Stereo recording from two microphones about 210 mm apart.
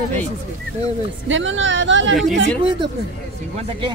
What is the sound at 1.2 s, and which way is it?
Speech, 65° right (ahead or behind).